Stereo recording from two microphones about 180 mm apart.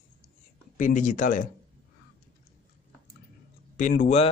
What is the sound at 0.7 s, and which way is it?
Speech, 45° left (ahead or behind).